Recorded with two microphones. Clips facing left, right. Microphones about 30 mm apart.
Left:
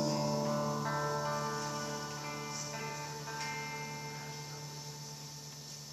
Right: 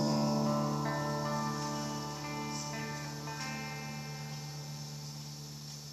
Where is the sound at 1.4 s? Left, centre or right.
Centre.